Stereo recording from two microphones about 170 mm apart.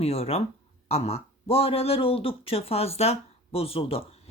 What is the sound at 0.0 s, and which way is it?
Speech, 35° left (ahead or behind).